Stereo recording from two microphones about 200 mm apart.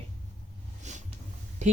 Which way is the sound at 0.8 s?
35° right (ahead or behind).